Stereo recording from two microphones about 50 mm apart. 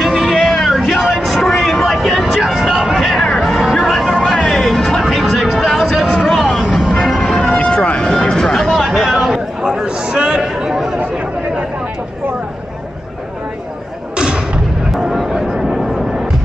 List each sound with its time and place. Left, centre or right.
0.2 s a sound: centre
1.2 s vehicle: centre
3.2 s music: centre
3.5 s music: centre
3.9 s vehicle: centre
5.0 s music: centre
5.9 s a sound: centre
6.9 s music: centre
7.5 s a sound: left; by 10.4 s centre
10.5 s chatter: centre
14.1 s artillery fire: centre
14.9 s vehicle: centre
15.3 s a sound: centre